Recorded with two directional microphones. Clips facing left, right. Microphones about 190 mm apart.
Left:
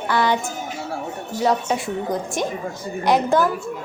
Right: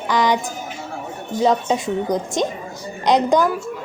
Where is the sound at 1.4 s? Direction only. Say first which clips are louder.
Right 3 dB; 20° right (ahead or behind).